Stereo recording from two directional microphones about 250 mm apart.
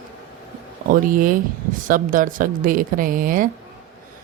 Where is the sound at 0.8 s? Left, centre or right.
Right.